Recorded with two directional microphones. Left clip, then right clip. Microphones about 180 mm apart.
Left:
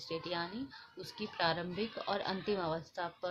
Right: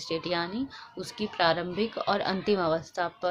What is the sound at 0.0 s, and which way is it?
Speech, 35° right (ahead or behind).